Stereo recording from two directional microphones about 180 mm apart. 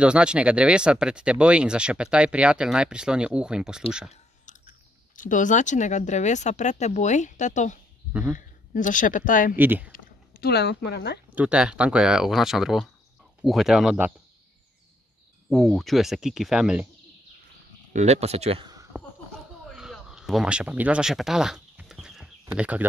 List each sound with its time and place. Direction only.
0.0 s speech: 5° right (ahead or behind)
4.1 s speech: 45° left (ahead or behind)
9.6 s speech: 10° right (ahead or behind)
9.9 s speech: 55° left (ahead or behind)
11.3 s speech: 5° right (ahead or behind)
15.5 s speech: centre (ahead or behind)
17.9 s speech: 35° right (ahead or behind)
19.7 s a sound: centre (ahead or behind)
22.6 s speech: 10° right (ahead or behind)